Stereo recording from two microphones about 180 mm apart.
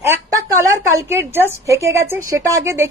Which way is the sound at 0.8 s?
15° right (ahead or behind).